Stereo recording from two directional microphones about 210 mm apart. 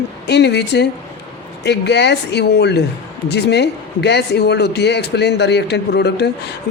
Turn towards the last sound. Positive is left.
turn(degrees=50)  # may be behind; listen again after turning